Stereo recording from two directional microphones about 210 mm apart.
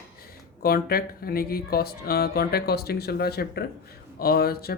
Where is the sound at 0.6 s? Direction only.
45° left (ahead or behind).